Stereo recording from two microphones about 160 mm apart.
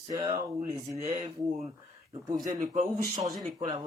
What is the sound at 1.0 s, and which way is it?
Speech, 45° right (ahead or behind).